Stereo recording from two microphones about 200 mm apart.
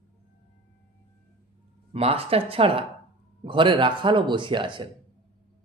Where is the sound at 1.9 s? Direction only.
30° right (ahead or behind).